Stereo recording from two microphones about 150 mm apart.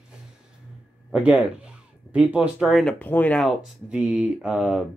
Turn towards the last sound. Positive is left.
turn(degrees=-5)  # may be behind; listen again after turning